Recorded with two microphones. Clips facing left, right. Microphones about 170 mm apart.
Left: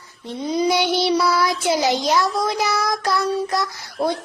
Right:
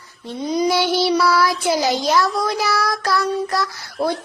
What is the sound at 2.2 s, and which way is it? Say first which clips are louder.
Child singing: right 1 dB; centre (ahead or behind).